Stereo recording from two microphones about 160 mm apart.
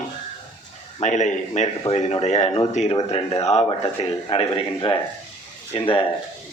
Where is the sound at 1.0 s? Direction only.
50° left (ahead or behind).